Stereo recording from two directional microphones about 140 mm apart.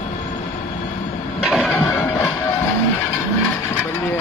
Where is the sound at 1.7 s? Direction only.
15° left (ahead or behind).